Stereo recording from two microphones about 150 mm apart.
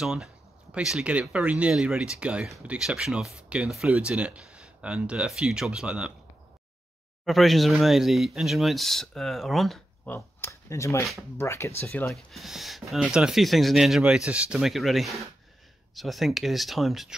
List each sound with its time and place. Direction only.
0.0 s speech: 5° right (ahead or behind)
7.2 s speech: centre (ahead or behind)
10.1 s speech: 15° left (ahead or behind)
12.1 s speech: centre (ahead or behind)